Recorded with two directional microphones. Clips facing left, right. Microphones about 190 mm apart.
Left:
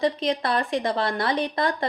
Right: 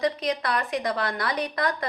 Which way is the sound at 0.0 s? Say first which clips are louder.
Left 2 dB; 25° left (ahead or behind).